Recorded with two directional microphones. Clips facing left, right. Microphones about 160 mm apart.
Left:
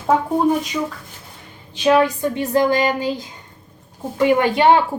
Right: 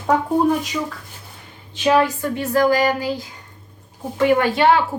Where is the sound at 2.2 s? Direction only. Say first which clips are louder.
Left 1 dB; 20° left (ahead or behind).